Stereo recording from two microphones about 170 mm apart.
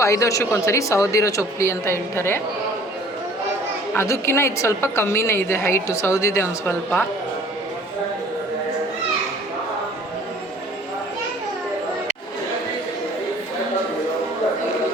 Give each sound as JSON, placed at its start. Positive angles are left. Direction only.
{"t": 0.0, "sound": "a woman's voice", "side_deg": 15}
{"t": 3.9, "sound": "a woman's voice", "side_deg": 15}